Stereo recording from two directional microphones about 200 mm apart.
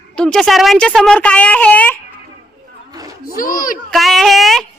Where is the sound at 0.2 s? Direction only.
5° left (ahead or behind).